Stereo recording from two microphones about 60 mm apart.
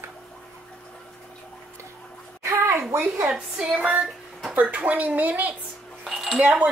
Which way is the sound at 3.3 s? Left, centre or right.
Centre.